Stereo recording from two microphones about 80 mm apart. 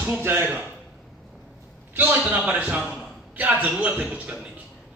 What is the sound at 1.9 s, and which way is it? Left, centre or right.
Speech, right.